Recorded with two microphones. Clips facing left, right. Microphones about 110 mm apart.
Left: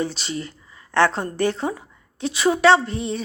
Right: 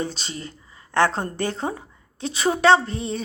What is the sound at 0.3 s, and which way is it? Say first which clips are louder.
Speech: left 5 dB; 30° right (ahead or behind).